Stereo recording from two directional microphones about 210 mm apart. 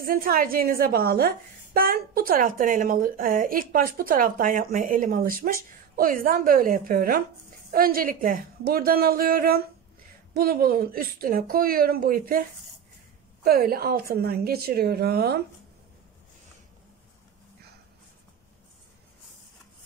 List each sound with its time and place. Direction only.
0.0 s a woman's voice: 45° right (ahead or behind)